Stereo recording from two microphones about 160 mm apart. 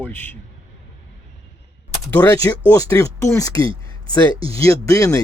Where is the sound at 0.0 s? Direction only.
10° left (ahead or behind).